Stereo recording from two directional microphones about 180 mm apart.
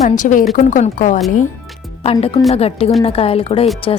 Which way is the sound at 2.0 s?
35° left (ahead or behind).